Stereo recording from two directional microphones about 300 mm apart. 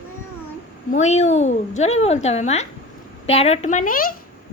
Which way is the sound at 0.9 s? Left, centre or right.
Left.